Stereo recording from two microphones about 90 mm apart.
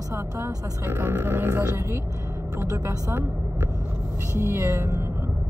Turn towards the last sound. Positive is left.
turn(degrees=-35)  # may be behind; listen again after turning